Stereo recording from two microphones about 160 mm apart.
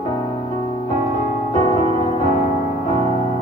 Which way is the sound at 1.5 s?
35° left (ahead or behind).